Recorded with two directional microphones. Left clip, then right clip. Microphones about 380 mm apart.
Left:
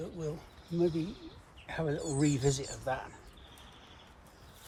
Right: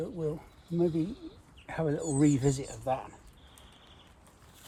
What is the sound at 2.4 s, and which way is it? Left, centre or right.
Speech, centre.